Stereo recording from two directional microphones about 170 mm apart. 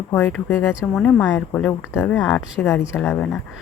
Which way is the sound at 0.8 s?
Centre (ahead or behind).